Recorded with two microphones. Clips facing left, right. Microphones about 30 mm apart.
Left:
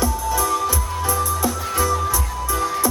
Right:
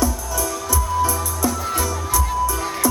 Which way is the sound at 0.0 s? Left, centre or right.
Left.